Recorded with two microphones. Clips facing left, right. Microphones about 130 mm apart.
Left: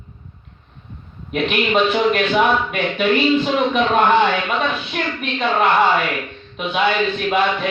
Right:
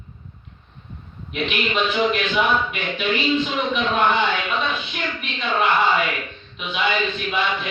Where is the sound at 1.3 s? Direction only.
50° left (ahead or behind).